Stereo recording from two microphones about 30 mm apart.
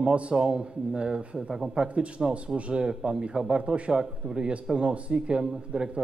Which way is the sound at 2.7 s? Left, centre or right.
Right.